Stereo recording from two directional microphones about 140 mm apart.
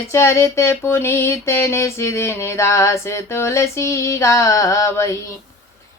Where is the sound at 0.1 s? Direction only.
20° left (ahead or behind).